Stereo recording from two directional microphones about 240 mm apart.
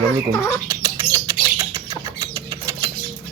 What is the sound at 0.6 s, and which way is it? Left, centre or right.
Bird, centre.